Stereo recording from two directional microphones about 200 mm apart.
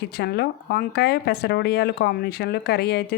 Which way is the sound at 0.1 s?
55° left (ahead or behind).